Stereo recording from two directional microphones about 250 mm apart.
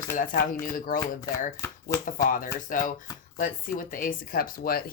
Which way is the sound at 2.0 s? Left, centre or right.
Left.